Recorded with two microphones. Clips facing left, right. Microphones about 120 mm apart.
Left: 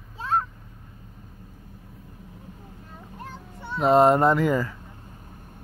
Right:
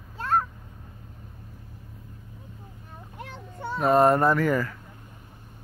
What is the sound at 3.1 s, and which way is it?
Child singing, 80° right.